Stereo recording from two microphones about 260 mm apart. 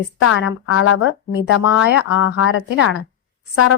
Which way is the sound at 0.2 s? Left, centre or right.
Left.